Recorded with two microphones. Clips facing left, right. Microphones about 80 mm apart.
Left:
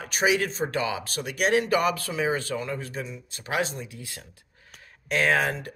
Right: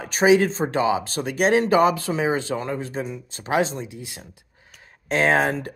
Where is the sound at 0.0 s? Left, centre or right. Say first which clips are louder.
Right 7 dB; right.